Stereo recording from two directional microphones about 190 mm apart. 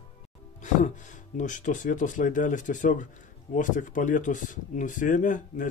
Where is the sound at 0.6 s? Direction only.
40° left (ahead or behind).